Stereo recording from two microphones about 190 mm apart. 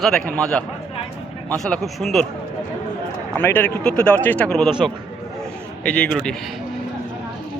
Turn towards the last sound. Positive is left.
turn(degrees=0)  # may be behind; listen again after turning